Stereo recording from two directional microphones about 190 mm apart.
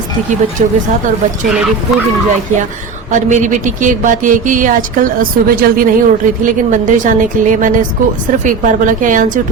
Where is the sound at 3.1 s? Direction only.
40° right (ahead or behind).